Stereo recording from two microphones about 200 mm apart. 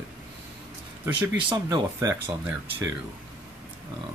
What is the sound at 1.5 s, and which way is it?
Speech, 20° right (ahead or behind).